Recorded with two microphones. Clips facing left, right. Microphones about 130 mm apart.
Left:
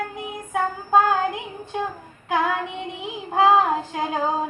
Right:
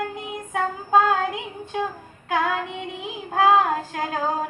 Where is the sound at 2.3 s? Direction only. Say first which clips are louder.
Left 1 dB; 10° left (ahead or behind).